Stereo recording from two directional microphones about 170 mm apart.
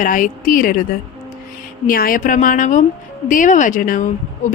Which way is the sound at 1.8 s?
55° left (ahead or behind).